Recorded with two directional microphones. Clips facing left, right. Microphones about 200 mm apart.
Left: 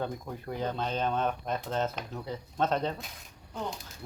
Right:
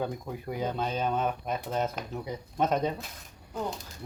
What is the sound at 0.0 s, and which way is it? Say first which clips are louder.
Speech: right 2 dB; 10° right (ahead or behind).